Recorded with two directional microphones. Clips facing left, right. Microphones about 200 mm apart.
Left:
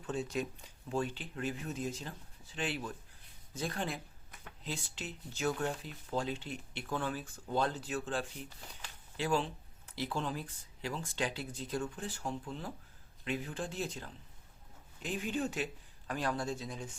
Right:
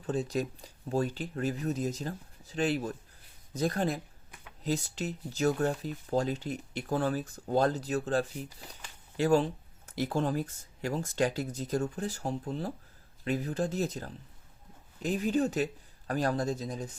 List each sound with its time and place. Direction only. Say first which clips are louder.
0.0 s speech: right 5 dB; 35° right (ahead or behind)